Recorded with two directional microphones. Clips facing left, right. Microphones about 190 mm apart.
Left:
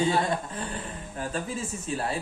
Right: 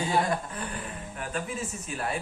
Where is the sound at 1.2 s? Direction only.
30° left (ahead or behind).